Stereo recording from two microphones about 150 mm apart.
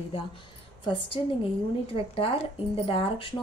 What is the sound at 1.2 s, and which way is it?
Speech, 35° left (ahead or behind).